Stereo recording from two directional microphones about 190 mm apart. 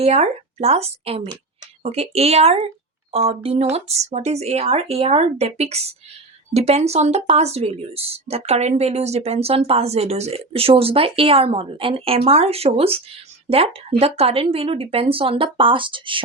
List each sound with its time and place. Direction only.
0.0 s speech: 35° right (ahead or behind)